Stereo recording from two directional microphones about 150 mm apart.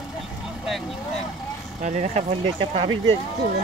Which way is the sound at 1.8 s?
50° right (ahead or behind).